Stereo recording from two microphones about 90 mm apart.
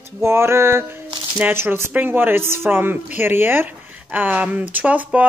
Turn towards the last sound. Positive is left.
turn(degrees=-15)  # may be behind; listen again after turning